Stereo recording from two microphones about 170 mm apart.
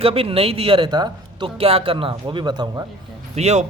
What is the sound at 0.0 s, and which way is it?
Speech, 35° right (ahead or behind).